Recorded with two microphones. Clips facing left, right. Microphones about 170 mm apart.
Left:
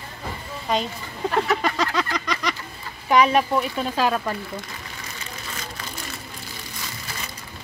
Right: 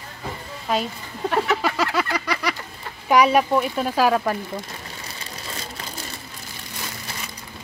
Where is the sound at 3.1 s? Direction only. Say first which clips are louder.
Right 1 dB; 10° right (ahead or behind).